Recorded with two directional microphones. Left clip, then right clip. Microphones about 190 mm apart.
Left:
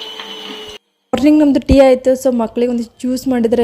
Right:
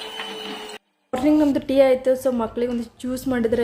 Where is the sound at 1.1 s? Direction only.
45° left (ahead or behind).